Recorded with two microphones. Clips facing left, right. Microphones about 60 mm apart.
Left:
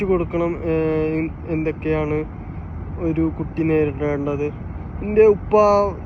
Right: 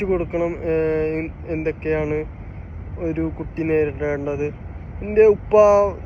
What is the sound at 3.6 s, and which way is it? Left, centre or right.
Speech, right.